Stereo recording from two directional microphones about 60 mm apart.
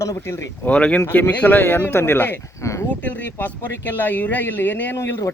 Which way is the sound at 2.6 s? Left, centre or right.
Left.